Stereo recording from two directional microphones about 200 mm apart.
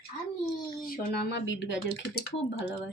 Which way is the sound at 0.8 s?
50° left (ahead or behind).